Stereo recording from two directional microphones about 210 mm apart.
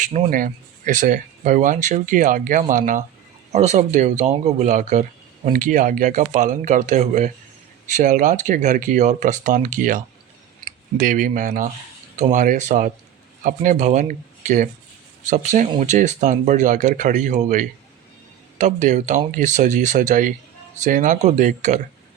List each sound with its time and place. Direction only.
0.0 s speech: 35° right (ahead or behind)